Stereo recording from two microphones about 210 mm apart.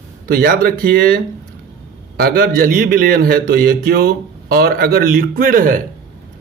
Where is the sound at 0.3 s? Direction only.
45° right (ahead or behind).